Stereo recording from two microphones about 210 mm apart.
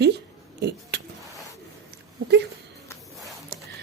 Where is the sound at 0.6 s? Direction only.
50° right (ahead or behind).